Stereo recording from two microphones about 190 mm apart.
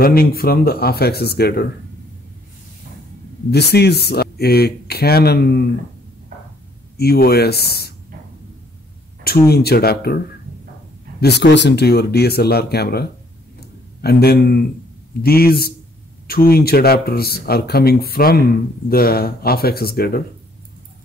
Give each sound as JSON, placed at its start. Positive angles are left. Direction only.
{"t": 0.0, "sound": "speech", "side_deg": 50}
{"t": 3.4, "sound": "speech", "side_deg": 60}
{"t": 7.0, "sound": "speech", "side_deg": 55}
{"t": 9.2, "sound": "speech", "side_deg": 55}
{"t": 14.0, "sound": "speech", "side_deg": 55}